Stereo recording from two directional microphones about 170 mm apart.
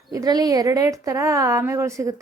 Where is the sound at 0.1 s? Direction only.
20° right (ahead or behind).